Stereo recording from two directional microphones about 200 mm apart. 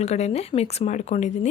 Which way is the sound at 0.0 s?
30° left (ahead or behind).